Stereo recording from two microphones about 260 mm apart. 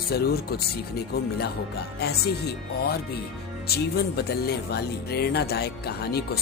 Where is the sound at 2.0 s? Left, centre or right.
Left.